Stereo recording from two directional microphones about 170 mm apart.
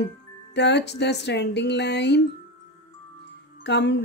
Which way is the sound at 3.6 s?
90° left.